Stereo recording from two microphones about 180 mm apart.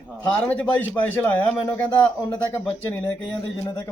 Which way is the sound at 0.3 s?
10° left (ahead or behind).